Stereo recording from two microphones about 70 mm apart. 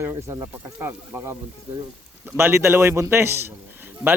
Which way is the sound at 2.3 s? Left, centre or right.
Right.